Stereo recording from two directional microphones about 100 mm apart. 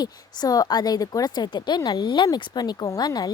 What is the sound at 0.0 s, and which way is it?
A woman's voice, 40° left (ahead or behind).